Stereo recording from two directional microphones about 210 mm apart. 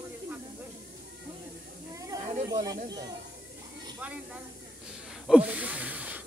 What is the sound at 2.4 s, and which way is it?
Speech, 20° right (ahead or behind).